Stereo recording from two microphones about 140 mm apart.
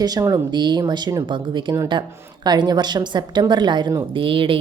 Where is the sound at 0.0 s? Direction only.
25° right (ahead or behind).